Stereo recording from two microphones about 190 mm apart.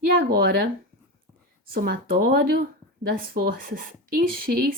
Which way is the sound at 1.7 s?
50° right (ahead or behind).